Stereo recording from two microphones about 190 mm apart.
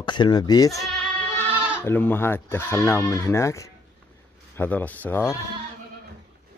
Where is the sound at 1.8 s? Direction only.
10° left (ahead or behind).